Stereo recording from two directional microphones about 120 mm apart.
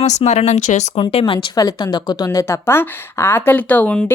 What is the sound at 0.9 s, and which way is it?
A woman's voice, 45° left (ahead or behind).